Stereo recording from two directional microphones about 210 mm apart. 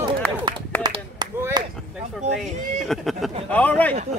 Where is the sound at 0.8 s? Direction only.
20° right (ahead or behind).